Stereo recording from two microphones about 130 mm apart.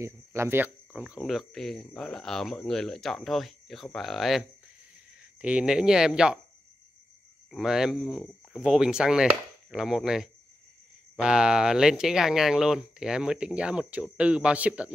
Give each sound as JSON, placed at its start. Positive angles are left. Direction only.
{"t": 0.0, "sound": "speech", "side_deg": -20}
{"t": 7.5, "sound": "speech", "side_deg": -5}